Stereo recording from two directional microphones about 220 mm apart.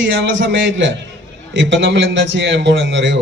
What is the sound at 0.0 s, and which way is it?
A man's voice, 60° right (ahead or behind).